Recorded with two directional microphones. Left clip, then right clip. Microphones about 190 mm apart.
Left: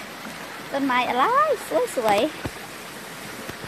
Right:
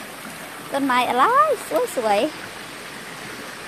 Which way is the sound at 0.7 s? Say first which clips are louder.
Right 3 dB; 25° right (ahead or behind).